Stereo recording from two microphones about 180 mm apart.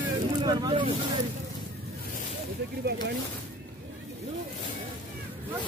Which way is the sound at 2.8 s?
65° right (ahead or behind).